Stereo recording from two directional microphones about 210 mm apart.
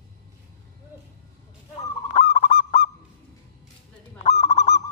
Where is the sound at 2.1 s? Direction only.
35° left (ahead or behind).